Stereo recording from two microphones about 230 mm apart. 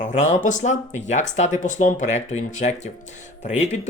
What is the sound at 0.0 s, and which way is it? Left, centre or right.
Speech, left.